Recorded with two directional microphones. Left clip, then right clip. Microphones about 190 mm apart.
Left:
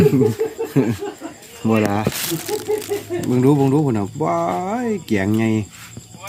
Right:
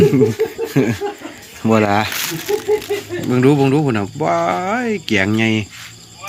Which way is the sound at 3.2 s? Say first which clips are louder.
Right 3 dB; centre (ahead or behind).